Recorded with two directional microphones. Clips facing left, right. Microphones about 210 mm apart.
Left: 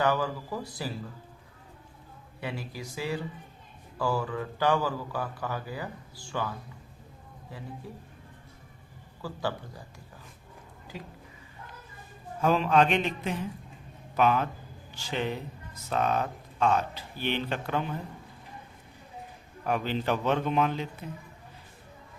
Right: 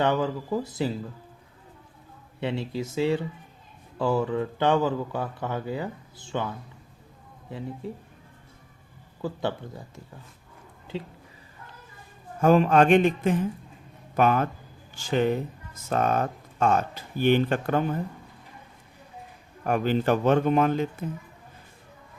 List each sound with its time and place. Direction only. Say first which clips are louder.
0.0 s a man's voice: right 3 dB; 25° right (ahead or behind)
2.4 s a man's voice: right 8 dB; 25° right (ahead or behind)
7.8 s a man's voice: right 8 dB; 25° right (ahead or behind)
9.2 s a man's voice: right 4 dB; 25° right (ahead or behind)
12.4 s speech: right 5 dB; 50° right (ahead or behind)
19.6 s speech: right 5 dB; 50° right (ahead or behind)